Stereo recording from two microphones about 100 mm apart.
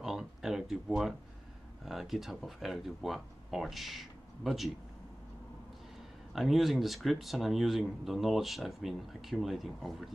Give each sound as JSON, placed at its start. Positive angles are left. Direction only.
{"t": 0.0, "sound": "a sound", "side_deg": -5}
{"t": 1.9, "sound": "speech", "side_deg": 0}
{"t": 6.3, "sound": "speech", "side_deg": 0}